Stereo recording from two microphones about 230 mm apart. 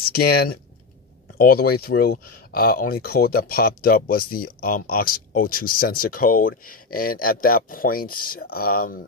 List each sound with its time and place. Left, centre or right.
0.1 s speech: left